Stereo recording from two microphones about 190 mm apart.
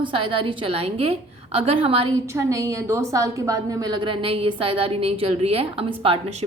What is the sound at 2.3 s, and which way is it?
A woman's voice, 15° right (ahead or behind).